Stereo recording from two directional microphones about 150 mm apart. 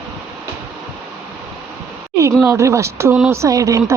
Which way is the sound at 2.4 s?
20° right (ahead or behind).